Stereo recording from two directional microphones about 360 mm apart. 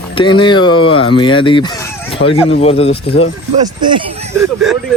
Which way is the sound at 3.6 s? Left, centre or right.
Centre.